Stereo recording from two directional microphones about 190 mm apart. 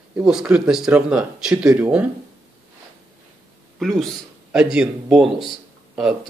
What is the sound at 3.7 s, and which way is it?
A man's voice, centre (ahead or behind).